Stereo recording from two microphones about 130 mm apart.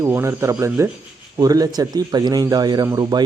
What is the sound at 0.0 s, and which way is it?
Speech, 20° right (ahead or behind).